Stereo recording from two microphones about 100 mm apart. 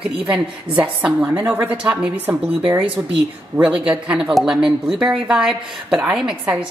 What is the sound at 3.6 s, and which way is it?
A woman's voice, 10° right (ahead or behind).